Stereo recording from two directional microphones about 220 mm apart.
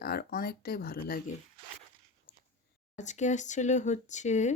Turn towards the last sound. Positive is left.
turn(degrees=30)  # may be behind; listen again after turning